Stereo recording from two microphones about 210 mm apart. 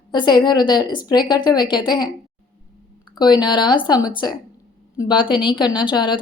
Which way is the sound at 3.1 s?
20° left (ahead or behind).